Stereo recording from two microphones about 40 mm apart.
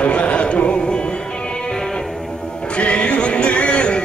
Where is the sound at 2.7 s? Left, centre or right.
Left.